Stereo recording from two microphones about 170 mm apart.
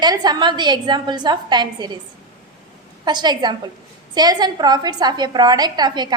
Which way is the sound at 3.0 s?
25° right (ahead or behind).